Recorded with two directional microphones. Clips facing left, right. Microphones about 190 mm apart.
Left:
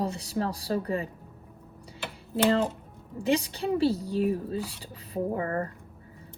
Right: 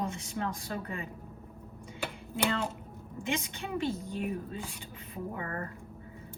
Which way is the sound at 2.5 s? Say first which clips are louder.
Left 8 dB; 35° left (ahead or behind).